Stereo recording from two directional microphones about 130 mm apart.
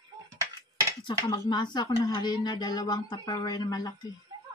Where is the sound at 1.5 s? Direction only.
35° left (ahead or behind).